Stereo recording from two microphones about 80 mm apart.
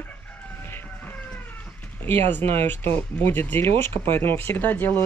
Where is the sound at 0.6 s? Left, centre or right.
Left.